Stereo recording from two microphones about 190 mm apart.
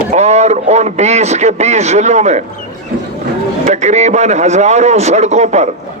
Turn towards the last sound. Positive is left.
turn(degrees=-35)  # may be behind; listen again after turning